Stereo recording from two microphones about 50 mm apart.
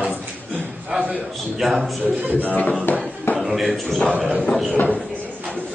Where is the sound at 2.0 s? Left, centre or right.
Right.